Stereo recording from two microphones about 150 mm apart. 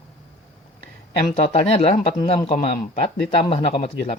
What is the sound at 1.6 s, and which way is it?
Speech, 45° left (ahead or behind).